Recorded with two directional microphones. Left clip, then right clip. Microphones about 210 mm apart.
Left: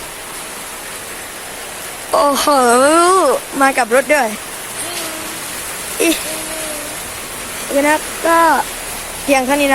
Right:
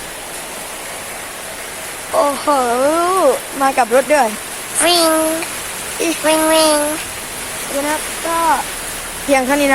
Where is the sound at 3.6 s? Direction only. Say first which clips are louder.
Left 1 dB; 15° left (ahead or behind).